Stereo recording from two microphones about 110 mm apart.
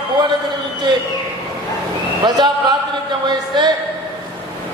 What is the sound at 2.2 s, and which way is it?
Speech, 40° right (ahead or behind).